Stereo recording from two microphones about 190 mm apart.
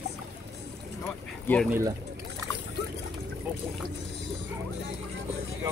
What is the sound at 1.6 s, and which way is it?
Speech, 10° right (ahead or behind).